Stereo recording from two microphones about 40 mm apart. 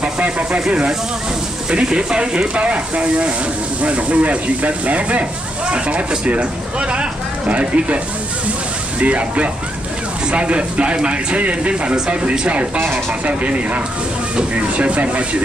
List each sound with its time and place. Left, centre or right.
0.0 s speech: right
9.0 s speech: right